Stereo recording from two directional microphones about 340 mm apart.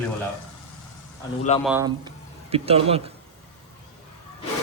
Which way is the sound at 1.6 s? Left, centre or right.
Centre.